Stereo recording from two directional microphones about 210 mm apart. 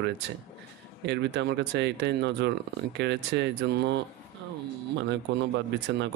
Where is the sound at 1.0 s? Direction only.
55° right (ahead or behind).